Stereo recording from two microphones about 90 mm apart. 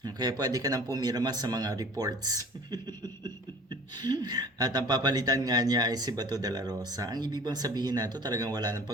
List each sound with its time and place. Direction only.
0.0 s speech: 50° right (ahead or behind)